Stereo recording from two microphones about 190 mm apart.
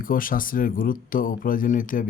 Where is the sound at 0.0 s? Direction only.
45° left (ahead or behind).